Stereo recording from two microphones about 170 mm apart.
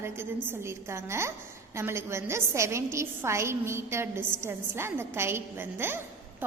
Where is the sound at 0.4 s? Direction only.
15° right (ahead or behind).